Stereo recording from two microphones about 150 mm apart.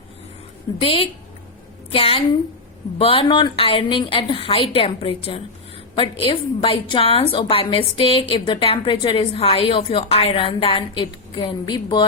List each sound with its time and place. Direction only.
0.8 s a woman's voice: 40° left (ahead or behind)